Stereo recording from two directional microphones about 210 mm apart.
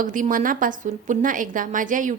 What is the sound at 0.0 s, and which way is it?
A woman's voice, 40° right (ahead or behind).